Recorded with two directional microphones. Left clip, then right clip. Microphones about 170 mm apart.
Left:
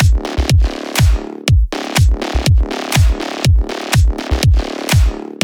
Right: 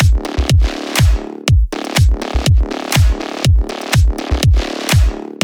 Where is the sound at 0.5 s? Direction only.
Centre (ahead or behind).